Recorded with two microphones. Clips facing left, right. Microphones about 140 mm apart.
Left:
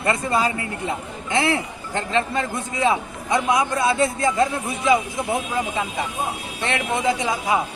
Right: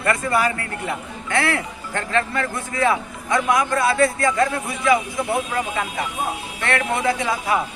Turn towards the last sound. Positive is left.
turn(degrees=20)  # may be behind; listen again after turning